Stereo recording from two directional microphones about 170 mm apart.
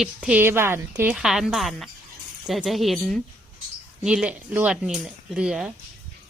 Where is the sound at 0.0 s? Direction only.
5° right (ahead or behind).